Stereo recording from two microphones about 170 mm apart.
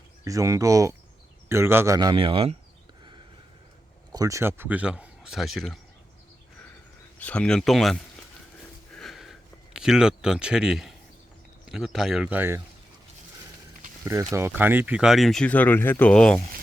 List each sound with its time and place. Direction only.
0.3 s speech: 20° right (ahead or behind)
4.1 s a man's voice: 20° right (ahead or behind); by 5.8 s centre (ahead or behind)
7.2 s speech: 5° left (ahead or behind)
9.0 s a sound: centre (ahead or behind)
9.7 s speech: 5° right (ahead or behind)
14.0 s speech: 15° right (ahead or behind); by 16.4 s 5° left (ahead or behind)